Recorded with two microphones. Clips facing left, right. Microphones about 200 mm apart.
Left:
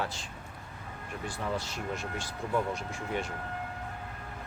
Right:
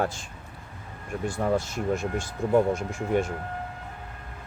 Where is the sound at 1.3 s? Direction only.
50° right (ahead or behind).